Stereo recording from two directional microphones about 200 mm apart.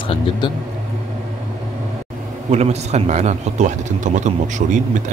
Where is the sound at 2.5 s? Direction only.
35° right (ahead or behind).